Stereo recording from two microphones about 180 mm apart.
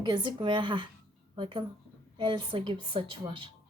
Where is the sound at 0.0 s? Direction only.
25° right (ahead or behind).